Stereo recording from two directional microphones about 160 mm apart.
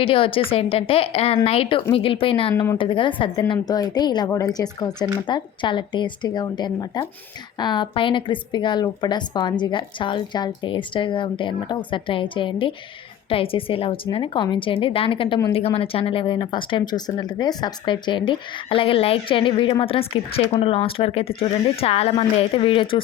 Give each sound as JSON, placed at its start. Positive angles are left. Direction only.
{"t": 0.0, "sound": "speech", "side_deg": 35}